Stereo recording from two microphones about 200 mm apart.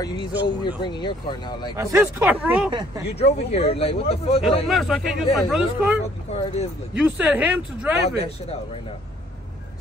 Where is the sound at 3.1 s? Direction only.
30° left (ahead or behind).